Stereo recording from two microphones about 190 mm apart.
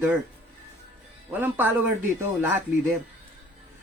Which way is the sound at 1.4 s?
10° right (ahead or behind).